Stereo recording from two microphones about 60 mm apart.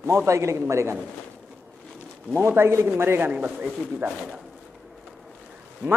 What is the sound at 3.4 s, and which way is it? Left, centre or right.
Speech, right.